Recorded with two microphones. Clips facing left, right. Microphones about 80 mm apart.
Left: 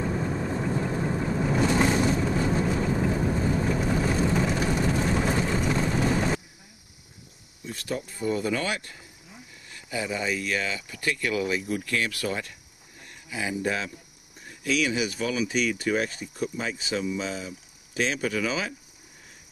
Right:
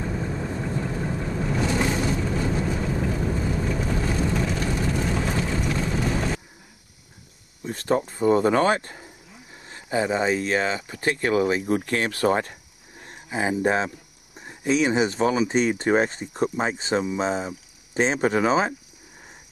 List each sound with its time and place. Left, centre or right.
0.1 s vehicle: centre
7.6 s speech: right